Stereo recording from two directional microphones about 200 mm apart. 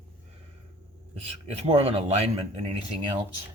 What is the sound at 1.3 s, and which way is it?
A man's voice, 30° right (ahead or behind).